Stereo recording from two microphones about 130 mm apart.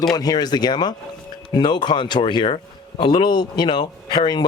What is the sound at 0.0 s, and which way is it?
Speech, 30° left (ahead or behind).